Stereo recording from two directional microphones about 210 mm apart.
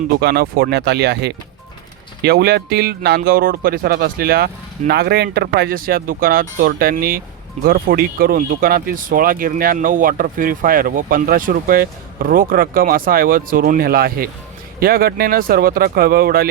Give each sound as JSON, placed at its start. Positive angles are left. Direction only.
{"t": 0.2, "sound": "speech", "side_deg": -50}